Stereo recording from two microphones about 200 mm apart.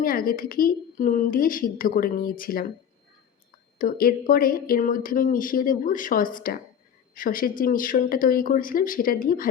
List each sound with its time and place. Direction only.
0.0 s speech: 45° left (ahead or behind)
3.8 s speech: 45° left (ahead or behind)